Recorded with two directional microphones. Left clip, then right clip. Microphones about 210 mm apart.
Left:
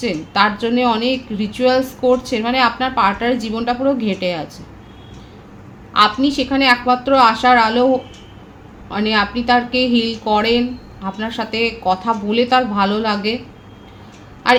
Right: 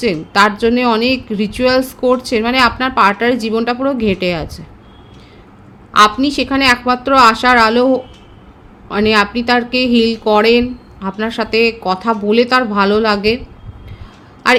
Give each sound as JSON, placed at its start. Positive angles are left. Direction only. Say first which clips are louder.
{"t": 0.0, "sound": "a woman's voice", "louder": "right 4 dB", "side_deg": -55}
{"t": 5.9, "sound": "a woman's voice", "louder": "right 4 dB", "side_deg": -55}
{"t": 14.4, "sound": "a man's voice", "louder": "right 2 dB", "side_deg": -55}